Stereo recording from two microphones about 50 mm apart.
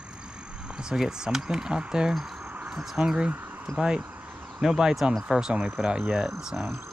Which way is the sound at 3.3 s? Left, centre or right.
Right.